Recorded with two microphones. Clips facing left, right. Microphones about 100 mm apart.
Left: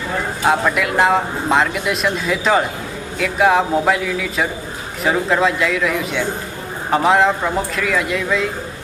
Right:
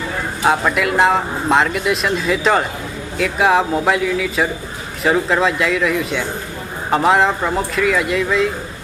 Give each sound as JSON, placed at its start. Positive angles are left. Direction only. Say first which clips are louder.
{"t": 0.4, "sound": "speech", "louder": "right 1 dB", "side_deg": 0}